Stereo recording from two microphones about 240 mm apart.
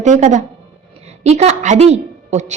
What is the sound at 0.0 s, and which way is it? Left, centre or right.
A woman's voice, right.